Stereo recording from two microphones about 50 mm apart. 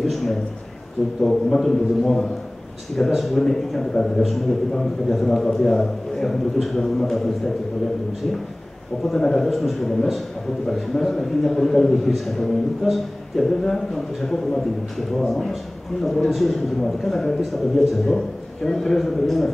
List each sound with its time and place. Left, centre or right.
0.0 s a sound: centre
1.2 s a man's voice: centre
9.0 s a man's voice: centre